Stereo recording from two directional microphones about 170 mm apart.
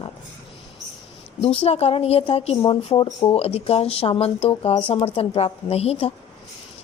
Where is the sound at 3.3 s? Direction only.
35° left (ahead or behind).